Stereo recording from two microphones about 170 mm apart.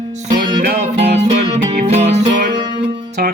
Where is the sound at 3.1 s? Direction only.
75° right (ahead or behind).